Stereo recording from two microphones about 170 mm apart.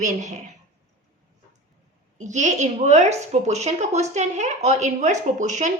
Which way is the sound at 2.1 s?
45° right (ahead or behind).